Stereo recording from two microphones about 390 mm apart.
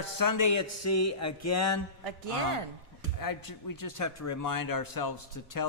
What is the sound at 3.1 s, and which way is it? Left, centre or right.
Speech, left.